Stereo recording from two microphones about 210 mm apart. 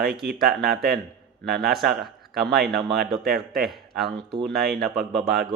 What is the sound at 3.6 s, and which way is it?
A man's voice, centre (ahead or behind).